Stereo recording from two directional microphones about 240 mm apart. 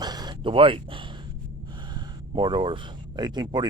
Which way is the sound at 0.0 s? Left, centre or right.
Centre.